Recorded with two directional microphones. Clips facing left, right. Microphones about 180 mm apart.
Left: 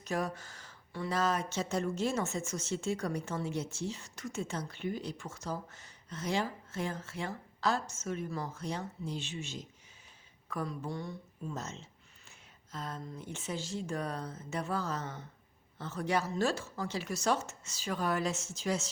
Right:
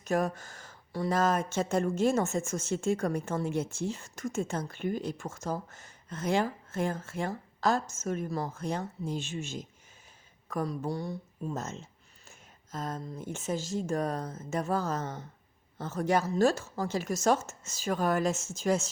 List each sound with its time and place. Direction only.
0.0 s speech: 50° right (ahead or behind)